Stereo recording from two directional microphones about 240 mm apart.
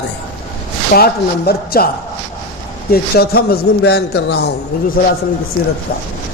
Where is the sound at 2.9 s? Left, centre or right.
Left.